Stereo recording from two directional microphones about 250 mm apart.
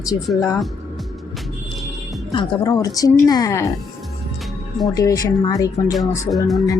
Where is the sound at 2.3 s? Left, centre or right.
Centre.